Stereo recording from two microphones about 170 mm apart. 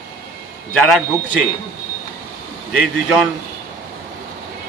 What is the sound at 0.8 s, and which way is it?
Speech, centre (ahead or behind).